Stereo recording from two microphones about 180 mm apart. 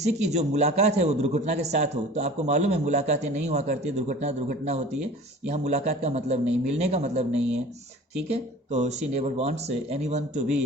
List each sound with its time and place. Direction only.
0.0 s a man's voice: 40° right (ahead or behind)